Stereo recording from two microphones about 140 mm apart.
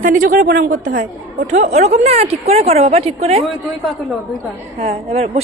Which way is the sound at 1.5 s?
55° right (ahead or behind).